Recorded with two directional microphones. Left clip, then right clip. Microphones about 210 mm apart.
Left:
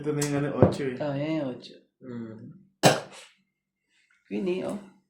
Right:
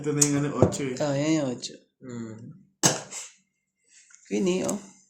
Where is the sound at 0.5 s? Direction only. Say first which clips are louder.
Left 1 dB; 20° left (ahead or behind).